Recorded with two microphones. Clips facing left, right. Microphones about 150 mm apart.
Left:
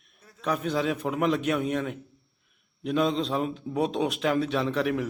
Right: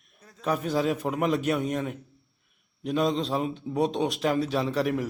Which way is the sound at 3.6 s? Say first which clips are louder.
Right 1 dB; 35° right (ahead or behind).